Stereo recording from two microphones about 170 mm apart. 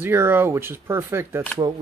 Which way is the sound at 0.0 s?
10° right (ahead or behind).